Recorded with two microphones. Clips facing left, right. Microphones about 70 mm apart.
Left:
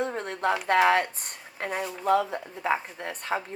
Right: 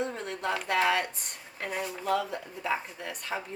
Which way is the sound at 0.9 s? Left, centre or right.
Left.